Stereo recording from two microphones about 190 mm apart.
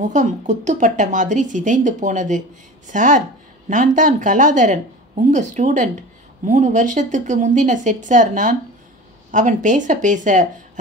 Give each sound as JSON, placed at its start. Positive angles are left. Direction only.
{"t": 0.0, "sound": "speech", "side_deg": -40}